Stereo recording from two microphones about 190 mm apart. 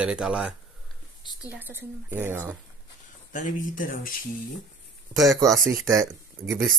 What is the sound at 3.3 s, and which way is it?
Speech, 45° left (ahead or behind).